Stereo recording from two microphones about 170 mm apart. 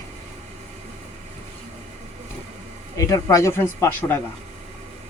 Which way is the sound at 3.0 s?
20° left (ahead or behind).